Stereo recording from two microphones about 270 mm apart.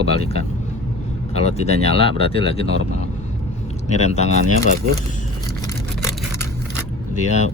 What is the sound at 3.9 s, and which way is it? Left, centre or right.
Speech, left.